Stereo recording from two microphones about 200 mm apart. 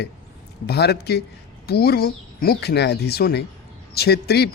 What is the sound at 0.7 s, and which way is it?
A man's voice, 55° left (ahead or behind).